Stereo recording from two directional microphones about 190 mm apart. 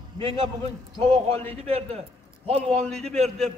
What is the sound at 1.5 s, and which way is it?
Speech, 30° right (ahead or behind).